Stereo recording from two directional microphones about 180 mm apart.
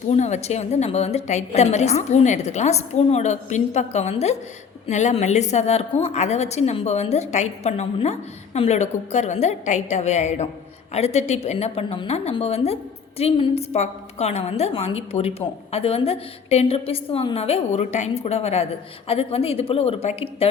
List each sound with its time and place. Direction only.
0.1 s a woman's voice: 40° left (ahead or behind)